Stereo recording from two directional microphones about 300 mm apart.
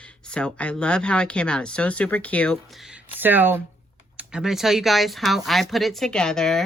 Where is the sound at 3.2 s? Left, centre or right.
Centre.